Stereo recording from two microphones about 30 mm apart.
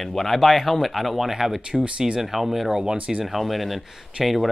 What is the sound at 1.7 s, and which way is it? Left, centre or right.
Speech, right.